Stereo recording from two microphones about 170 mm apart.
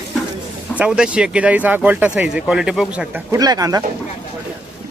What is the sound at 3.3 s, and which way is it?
Speech, 20° right (ahead or behind).